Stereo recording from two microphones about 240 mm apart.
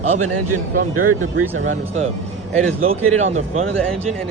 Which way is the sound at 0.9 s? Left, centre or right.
Right.